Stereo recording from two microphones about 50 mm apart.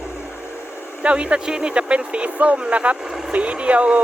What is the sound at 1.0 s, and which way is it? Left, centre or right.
Speech, right.